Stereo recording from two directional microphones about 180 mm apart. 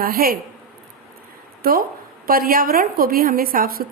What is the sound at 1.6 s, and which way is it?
A woman's voice, 55° right (ahead or behind).